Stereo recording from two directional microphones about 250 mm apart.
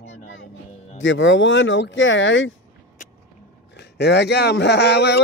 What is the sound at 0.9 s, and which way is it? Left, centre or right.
Speech, left.